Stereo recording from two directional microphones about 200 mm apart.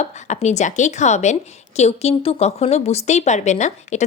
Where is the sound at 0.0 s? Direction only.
35° left (ahead or behind).